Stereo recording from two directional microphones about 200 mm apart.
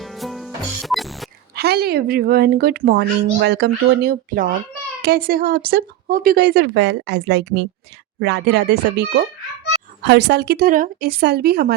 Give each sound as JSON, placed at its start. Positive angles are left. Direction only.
{"t": 0.0, "sound": "music", "side_deg": 0}
{"t": 1.5, "sound": "a woman's voice", "side_deg": -50}